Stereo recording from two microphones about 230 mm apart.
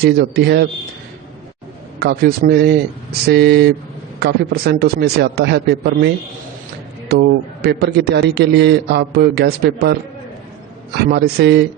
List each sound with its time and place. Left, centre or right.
0.0 s a man's voice: right
2.0 s a man's voice: right
11.1 s a man's voice: right